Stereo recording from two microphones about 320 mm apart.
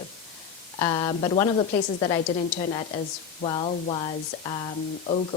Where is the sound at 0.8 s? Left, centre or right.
Centre.